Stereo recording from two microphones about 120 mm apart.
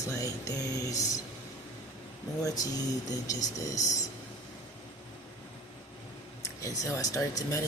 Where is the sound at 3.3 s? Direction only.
30° left (ahead or behind).